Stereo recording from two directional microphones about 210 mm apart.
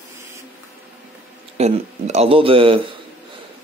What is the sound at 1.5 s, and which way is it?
Speech, 30° right (ahead or behind).